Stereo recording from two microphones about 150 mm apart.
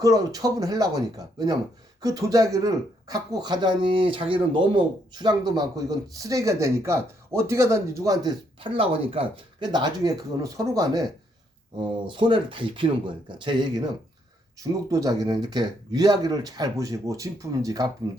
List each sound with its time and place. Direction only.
0.0 s speech: 25° right (ahead or behind)
8.6 s speech: 35° right (ahead or behind)
11.8 s speech: 35° right (ahead or behind)
14.8 s speech: 25° right (ahead or behind)